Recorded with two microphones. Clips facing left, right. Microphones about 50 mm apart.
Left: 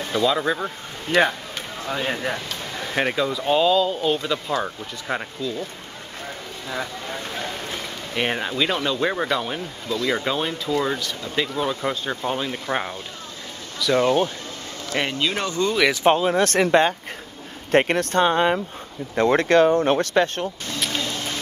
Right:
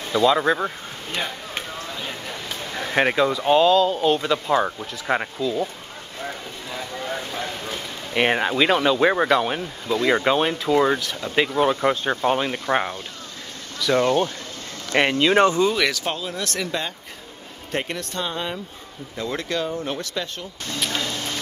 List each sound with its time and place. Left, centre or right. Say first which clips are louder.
0.2 s speech: right 3 dB; centre
2.0 s speech: left 7 dB; left
2.8 s speech: right 3 dB; centre
3.3 s speech: right 1 dB; centre
8.1 s speech: right 5 dB; right
11.0 s speech: right 1 dB; centre
11.3 s speech: right 5 dB; right
12.5 s speech: right 3 dB; centre
14.0 s speech: left 2 dB; centre
15.1 s speech: right 8 dB; right
15.9 s speech: left 9 dB; left
20.8 s a sound: even; centre